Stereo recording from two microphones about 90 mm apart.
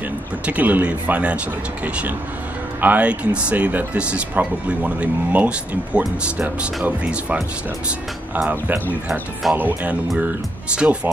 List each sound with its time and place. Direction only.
0.5 s speech: 20° right (ahead or behind)
2.8 s speech: 15° right (ahead or behind)
8.4 s speech: 15° right (ahead or behind)